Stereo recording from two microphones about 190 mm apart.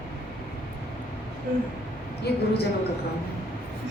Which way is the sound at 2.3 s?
60° left (ahead or behind).